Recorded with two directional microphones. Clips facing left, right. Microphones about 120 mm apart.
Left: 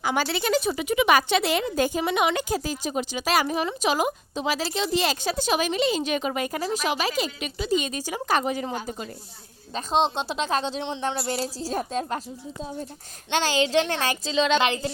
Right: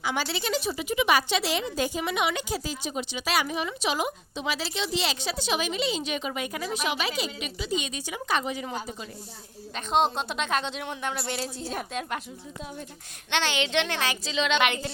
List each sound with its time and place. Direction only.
0.0 s a woman's voice: 50° left (ahead or behind)
9.7 s speech: 30° left (ahead or behind)
13.3 s speech: 35° left (ahead or behind)